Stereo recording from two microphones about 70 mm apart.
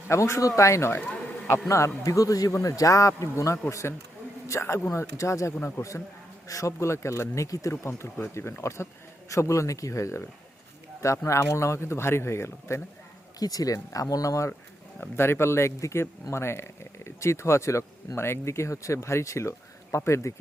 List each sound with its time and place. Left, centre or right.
0.1 s speech: left
7.7 s speech: left
13.4 s speech: left
15.0 s speech: left